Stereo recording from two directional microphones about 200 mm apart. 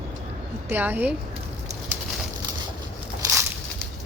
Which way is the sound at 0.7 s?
10° right (ahead or behind).